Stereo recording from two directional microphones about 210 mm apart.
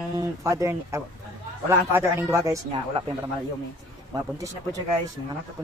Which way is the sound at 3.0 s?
25° right (ahead or behind).